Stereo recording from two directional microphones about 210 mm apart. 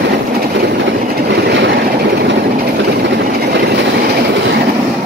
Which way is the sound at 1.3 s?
50° right (ahead or behind).